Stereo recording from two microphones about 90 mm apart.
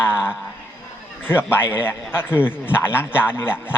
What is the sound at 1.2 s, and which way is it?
A man's voice, 25° left (ahead or behind).